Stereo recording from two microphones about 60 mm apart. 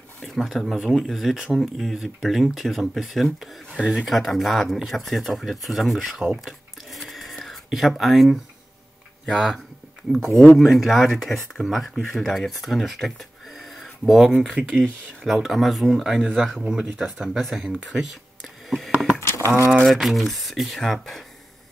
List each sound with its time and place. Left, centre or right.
0.2 s speech: centre
6.3 s a sound: centre
9.3 s speech: centre
17.4 s speech: centre
19.1 s a sound: left
19.8 s speech: centre